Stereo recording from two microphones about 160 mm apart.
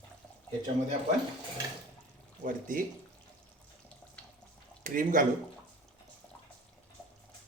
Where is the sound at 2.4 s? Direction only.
55° right (ahead or behind).